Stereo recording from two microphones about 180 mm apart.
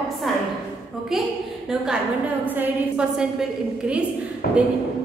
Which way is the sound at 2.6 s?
5° right (ahead or behind).